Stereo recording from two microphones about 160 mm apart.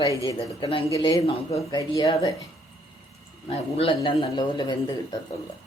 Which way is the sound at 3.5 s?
35° left (ahead or behind).